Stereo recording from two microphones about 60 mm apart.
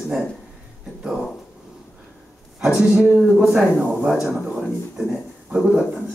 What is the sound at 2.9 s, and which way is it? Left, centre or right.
Speech, right.